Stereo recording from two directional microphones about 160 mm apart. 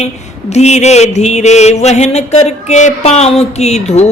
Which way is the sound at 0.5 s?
45° left (ahead or behind).